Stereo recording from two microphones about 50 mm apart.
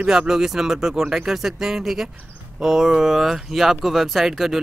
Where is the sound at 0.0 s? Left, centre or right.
Centre.